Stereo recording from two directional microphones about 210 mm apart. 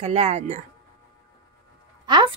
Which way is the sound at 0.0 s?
30° right (ahead or behind).